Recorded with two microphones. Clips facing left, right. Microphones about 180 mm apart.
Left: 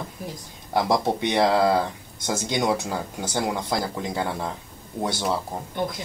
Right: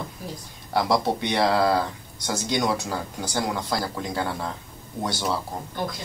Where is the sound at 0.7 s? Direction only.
20° left (ahead or behind).